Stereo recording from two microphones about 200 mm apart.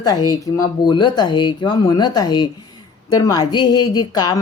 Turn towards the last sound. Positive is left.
turn(degrees=20)  # may be behind; listen again after turning